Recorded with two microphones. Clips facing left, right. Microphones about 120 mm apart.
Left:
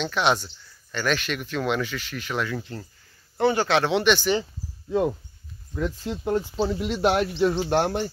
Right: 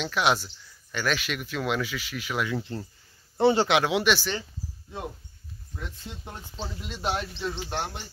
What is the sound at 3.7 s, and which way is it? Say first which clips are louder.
Speech: left 3 dB; 5° right (ahead or behind).